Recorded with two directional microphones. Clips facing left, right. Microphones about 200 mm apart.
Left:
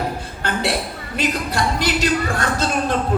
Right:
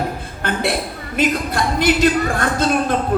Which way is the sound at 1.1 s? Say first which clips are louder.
Right 3 dB; 55° right (ahead or behind).